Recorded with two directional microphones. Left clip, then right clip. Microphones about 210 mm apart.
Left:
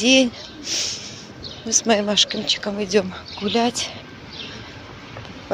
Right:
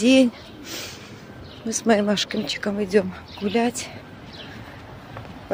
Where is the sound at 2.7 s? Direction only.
15° right (ahead or behind).